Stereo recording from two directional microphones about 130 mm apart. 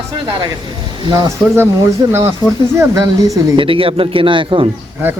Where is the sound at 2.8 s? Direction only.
25° right (ahead or behind).